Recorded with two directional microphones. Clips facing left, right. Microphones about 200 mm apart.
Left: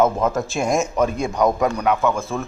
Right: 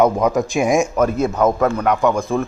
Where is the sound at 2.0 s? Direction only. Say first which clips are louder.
Right 4 dB; 15° right (ahead or behind).